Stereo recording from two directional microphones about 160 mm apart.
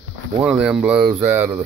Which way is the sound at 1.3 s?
10° right (ahead or behind).